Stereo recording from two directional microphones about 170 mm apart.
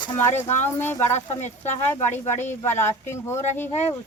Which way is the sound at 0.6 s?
10° left (ahead or behind).